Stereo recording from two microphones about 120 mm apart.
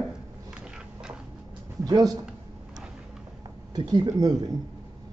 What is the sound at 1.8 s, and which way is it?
Speech, 35° right (ahead or behind).